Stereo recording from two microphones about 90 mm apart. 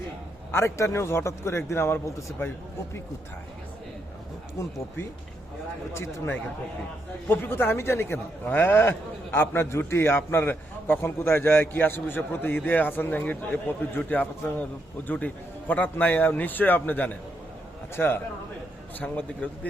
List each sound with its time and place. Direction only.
0.5 s a man's voice: 30° left (ahead or behind)
5.9 s a man's voice: 30° left (ahead or behind)